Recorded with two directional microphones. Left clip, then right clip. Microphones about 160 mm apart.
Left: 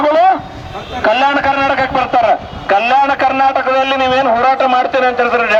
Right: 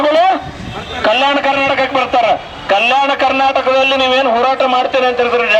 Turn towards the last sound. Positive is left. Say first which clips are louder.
# even
turn(degrees=-20)  # may be behind; listen again after turning